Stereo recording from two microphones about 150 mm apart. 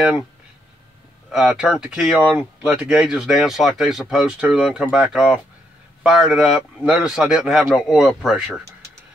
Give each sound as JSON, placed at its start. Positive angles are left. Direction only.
{"t": 1.3, "sound": "speech", "side_deg": -5}